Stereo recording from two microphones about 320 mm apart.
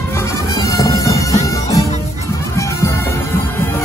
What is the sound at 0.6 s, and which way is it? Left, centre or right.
Music, centre.